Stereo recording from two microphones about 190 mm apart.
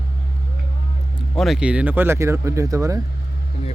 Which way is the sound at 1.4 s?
Centre (ahead or behind).